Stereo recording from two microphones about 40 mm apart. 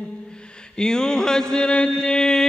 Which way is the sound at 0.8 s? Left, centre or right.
Centre.